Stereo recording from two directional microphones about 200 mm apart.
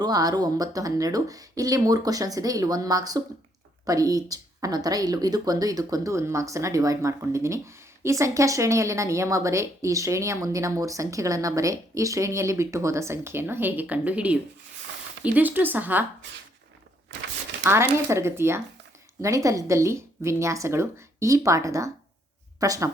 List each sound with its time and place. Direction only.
0.0 s a woman's voice: 20° right (ahead or behind)
17.6 s a woman's voice: 10° right (ahead or behind)